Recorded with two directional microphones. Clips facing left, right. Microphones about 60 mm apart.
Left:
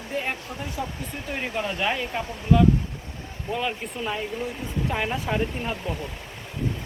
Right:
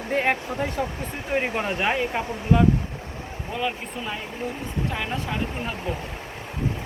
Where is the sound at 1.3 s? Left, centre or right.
Right.